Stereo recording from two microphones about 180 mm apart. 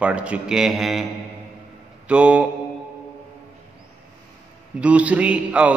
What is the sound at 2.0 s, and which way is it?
Mantra, 5° right (ahead or behind).